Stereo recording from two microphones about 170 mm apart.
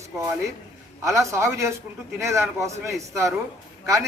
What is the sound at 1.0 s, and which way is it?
A man's voice, 15° right (ahead or behind).